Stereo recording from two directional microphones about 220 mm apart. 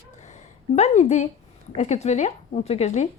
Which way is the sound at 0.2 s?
30° left (ahead or behind).